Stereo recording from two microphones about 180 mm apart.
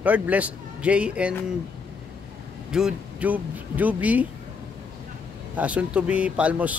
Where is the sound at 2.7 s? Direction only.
5° right (ahead or behind).